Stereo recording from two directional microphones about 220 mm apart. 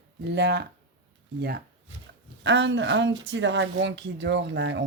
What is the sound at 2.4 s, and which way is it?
Speech, 55° right (ahead or behind).